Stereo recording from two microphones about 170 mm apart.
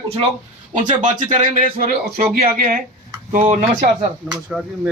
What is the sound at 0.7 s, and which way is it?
Speech, 50° right (ahead or behind).